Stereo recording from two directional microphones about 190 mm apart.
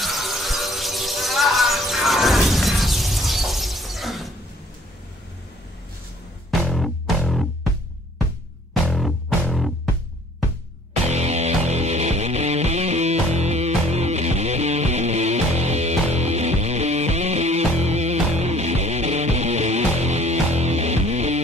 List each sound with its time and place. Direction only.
0.0 s music: centre (ahead or behind)
6.6 s music: centre (ahead or behind)
8.8 s music: centre (ahead or behind)
11.1 s music: 35° right (ahead or behind)